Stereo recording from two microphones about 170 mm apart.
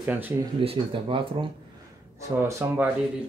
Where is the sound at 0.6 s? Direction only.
30° right (ahead or behind).